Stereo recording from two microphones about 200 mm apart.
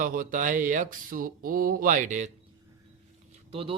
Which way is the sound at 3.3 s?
30° right (ahead or behind).